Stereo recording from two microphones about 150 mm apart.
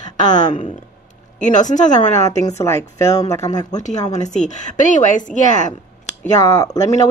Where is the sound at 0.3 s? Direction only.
55° left (ahead or behind).